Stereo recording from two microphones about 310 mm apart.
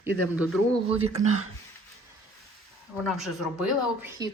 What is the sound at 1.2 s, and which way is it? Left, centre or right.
Speech, right.